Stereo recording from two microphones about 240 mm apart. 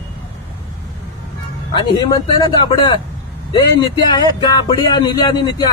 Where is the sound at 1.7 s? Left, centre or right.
Centre.